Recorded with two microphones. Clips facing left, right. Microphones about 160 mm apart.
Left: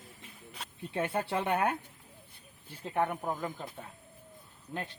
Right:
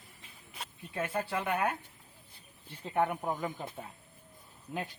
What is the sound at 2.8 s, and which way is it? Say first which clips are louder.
Speech: right 1 dB; 5° right (ahead or behind).